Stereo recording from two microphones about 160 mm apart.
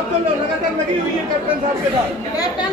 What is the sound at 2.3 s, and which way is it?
Speech, 25° left (ahead or behind).